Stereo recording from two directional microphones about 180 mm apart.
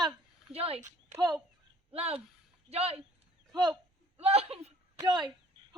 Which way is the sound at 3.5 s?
25° right (ahead or behind).